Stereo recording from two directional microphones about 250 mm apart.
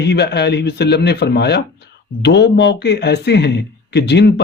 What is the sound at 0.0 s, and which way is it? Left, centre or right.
A man's voice, left.